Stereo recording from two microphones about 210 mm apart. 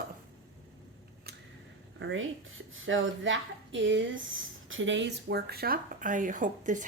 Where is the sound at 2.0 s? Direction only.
65° right (ahead or behind).